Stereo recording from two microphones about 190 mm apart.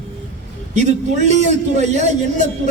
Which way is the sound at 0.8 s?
35° right (ahead or behind).